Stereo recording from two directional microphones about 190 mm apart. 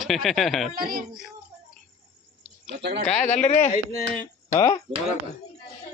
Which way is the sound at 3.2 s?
40° left (ahead or behind).